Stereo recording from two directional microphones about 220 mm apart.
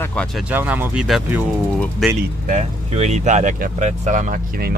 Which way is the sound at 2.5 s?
30° right (ahead or behind).